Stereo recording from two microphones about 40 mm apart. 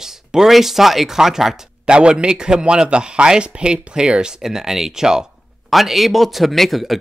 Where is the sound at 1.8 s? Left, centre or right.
Right.